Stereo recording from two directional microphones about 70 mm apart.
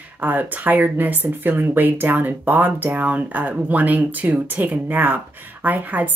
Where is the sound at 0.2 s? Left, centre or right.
Right.